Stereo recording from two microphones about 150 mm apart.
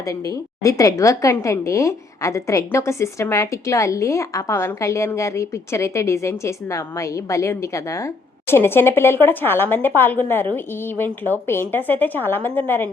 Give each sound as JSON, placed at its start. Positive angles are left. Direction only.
{"t": 0.1, "sound": "a woman's voice", "side_deg": 20}